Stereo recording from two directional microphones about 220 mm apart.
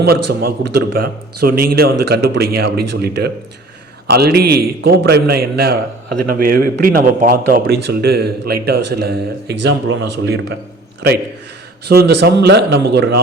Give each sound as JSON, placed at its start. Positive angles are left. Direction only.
{"t": 0.0, "sound": "a man's voice", "side_deg": -45}
{"t": 11.9, "sound": "a man's voice", "side_deg": -45}